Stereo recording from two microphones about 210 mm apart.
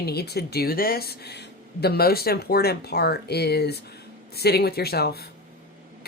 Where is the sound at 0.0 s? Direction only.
50° left (ahead or behind).